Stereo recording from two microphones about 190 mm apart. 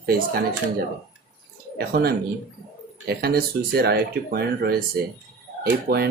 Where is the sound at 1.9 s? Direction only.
55° right (ahead or behind).